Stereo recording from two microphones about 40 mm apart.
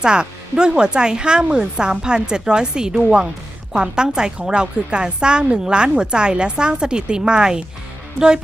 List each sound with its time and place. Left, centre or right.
0.0 s a woman's voice: right